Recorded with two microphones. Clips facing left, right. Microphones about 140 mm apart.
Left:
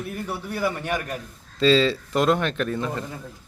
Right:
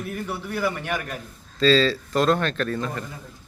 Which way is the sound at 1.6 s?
20° left (ahead or behind).